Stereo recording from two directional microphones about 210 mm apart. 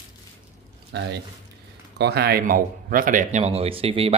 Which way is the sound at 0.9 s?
55° right (ahead or behind).